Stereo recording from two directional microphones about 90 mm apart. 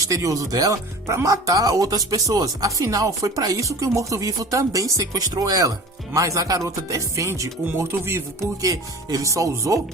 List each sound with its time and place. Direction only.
0.0 s speech: 40° right (ahead or behind)